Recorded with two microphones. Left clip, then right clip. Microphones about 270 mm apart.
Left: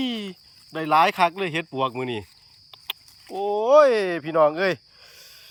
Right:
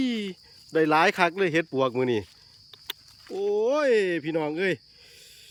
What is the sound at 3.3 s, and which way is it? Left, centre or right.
Speech, centre.